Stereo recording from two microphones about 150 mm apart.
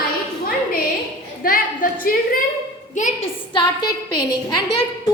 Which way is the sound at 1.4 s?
70° left (ahead or behind).